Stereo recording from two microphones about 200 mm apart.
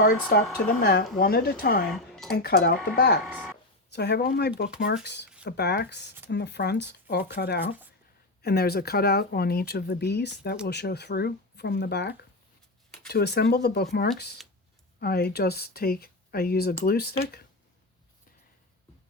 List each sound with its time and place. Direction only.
0.3 s speech: 55° left (ahead or behind)
1.9 s a sound: centre (ahead or behind)
2.3 s speech: 55° left (ahead or behind)